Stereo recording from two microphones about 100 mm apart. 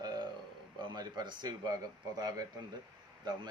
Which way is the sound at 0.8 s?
45° right (ahead or behind).